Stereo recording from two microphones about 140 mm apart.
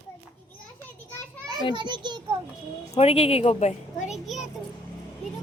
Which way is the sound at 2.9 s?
45° left (ahead or behind).